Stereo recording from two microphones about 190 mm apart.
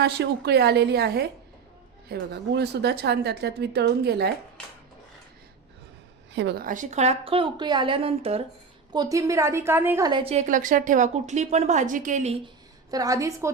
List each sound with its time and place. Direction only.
0.0 s speech: 60° right (ahead or behind)
6.3 s speech: 65° right (ahead or behind)
6.7 s speech: 40° right (ahead or behind)
8.9 s a woman's voice: 20° right (ahead or behind)
10.1 s a woman's voice: 30° right (ahead or behind)
12.9 s a woman's voice: 20° right (ahead or behind)